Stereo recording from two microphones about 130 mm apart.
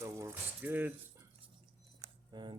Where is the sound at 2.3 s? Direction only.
35° right (ahead or behind).